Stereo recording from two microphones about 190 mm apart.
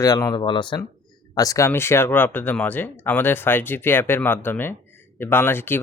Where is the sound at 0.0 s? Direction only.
15° left (ahead or behind).